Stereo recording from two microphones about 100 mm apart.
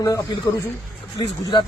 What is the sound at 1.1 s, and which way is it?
Speech, 45° left (ahead or behind).